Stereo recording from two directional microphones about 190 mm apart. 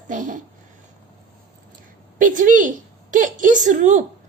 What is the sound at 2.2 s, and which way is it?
A woman's voice, 45° right (ahead or behind).